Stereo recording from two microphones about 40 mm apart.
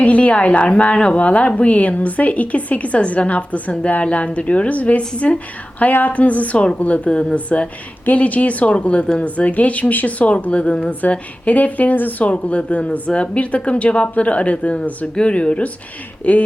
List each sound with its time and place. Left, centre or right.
0.0 s speech: left
5.9 s speech: left
7.1 s speech: left
7.3 s speech: left